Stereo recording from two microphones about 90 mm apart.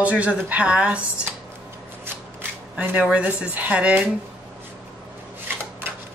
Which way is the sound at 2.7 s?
10° right (ahead or behind).